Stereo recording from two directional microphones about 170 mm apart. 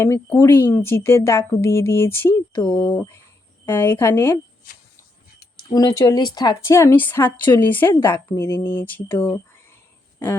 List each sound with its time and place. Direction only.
0.0 s speech: 15° left (ahead or behind)
3.7 s speech: 15° left (ahead or behind)
5.7 s speech: 20° left (ahead or behind)